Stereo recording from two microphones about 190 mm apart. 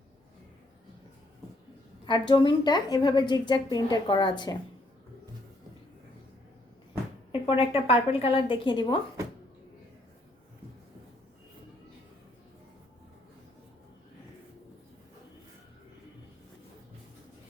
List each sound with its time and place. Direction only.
2.0 s a woman's voice: 25° left (ahead or behind)
7.4 s a woman's voice: 30° left (ahead or behind)